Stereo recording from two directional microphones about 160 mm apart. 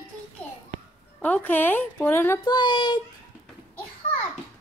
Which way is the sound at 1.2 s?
10° left (ahead or behind).